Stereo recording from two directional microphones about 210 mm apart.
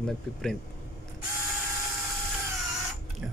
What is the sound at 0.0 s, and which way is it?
Speech, centre (ahead or behind).